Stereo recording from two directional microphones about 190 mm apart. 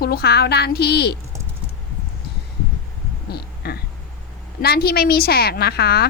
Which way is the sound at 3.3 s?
55° left (ahead or behind).